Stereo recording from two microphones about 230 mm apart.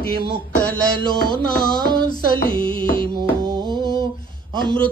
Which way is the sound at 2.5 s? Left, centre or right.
Right.